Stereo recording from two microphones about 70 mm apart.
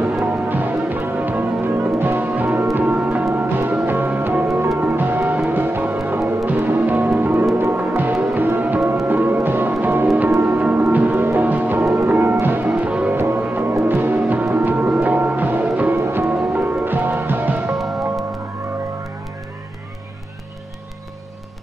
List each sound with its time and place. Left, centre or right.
0.2 s music: right
11.8 s music: right
12.1 s music: right
13.1 s music: right
16.0 s music: right
17.7 s music: centre